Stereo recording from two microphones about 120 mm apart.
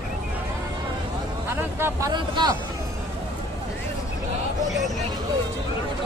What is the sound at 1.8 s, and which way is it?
Speech, 25° right (ahead or behind).